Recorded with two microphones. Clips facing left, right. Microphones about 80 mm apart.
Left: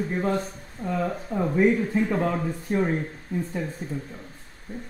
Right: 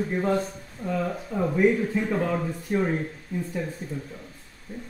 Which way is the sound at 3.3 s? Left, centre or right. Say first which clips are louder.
Left 3 dB; left.